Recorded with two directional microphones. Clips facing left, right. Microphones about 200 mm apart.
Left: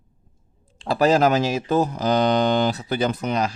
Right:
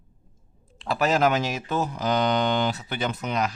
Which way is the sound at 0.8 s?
35° left (ahead or behind).